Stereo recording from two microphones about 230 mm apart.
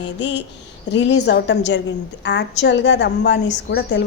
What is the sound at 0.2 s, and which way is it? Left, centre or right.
Speech, left.